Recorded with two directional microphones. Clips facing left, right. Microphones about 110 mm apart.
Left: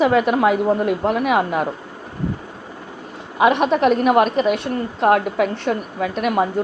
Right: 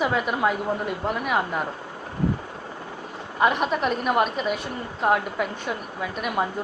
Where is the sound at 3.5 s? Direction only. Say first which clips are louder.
Left 7 dB; centre (ahead or behind).